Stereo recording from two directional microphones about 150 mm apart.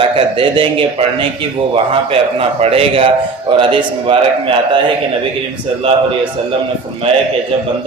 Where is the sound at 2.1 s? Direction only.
40° right (ahead or behind).